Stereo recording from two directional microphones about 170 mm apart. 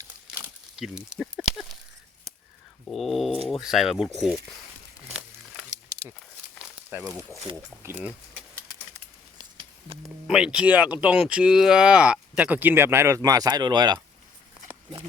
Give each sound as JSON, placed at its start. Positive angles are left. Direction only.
{"t": 0.3, "sound": "a sound", "side_deg": -10}
{"t": 2.8, "sound": "dog", "side_deg": 0}
{"t": 3.5, "sound": "speech", "side_deg": 0}
{"t": 6.9, "sound": "speech", "side_deg": -10}
{"t": 9.4, "sound": "a sound", "side_deg": -30}
{"t": 10.2, "sound": "speech", "side_deg": -5}